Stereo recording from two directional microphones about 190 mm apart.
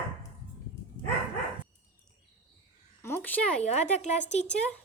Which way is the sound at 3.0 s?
10° left (ahead or behind).